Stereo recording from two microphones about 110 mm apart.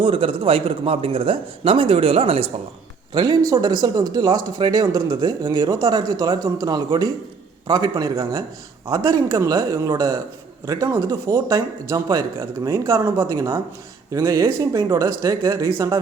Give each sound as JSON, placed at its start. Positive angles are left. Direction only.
{"t": 0.0, "sound": "a man's voice", "side_deg": -55}
{"t": 3.1, "sound": "speech", "side_deg": -40}